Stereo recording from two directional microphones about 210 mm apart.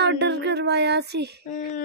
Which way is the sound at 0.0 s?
55° right (ahead or behind).